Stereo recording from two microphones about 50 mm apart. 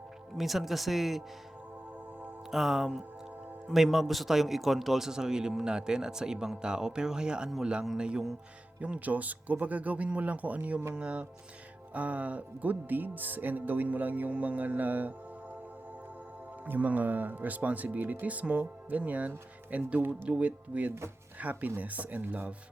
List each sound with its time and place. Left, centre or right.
0.3 s speech: centre
2.5 s speech: centre
8.8 s speech: right
16.6 s speech: right